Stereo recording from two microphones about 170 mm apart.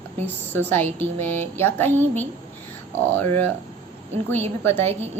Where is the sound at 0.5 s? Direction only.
10° left (ahead or behind).